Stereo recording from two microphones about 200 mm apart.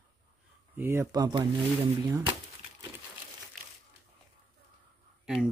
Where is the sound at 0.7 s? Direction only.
10° right (ahead or behind).